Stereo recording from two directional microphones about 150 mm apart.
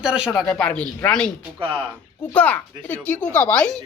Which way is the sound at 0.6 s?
10° left (ahead or behind).